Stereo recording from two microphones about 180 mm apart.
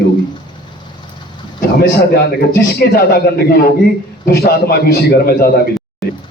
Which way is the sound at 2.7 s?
60° left (ahead or behind).